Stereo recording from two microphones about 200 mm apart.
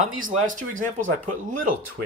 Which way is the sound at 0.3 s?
40° right (ahead or behind).